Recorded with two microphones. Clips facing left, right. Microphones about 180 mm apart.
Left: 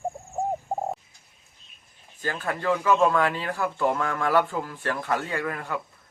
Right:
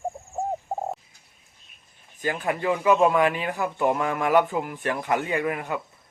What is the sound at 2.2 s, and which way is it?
Speech, 15° right (ahead or behind).